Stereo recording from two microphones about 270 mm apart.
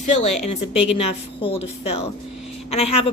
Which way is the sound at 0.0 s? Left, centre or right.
Left.